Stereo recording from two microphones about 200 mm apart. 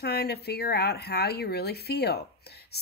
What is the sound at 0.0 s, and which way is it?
Speech, 55° left (ahead or behind).